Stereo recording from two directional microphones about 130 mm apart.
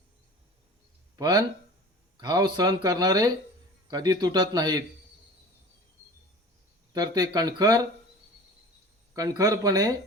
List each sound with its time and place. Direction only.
1.1 s a man's voice: 30° right (ahead or behind)
6.9 s speech: 30° right (ahead or behind)
9.1 s speech: 25° right (ahead or behind)